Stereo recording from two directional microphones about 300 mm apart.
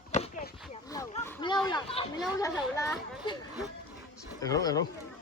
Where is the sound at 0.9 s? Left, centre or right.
Centre.